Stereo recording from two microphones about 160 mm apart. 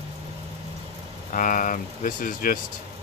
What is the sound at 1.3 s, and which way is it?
Speech, 55° left (ahead or behind).